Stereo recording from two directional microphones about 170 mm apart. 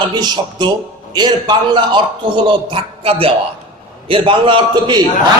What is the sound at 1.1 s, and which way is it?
A man's voice, 25° right (ahead or behind).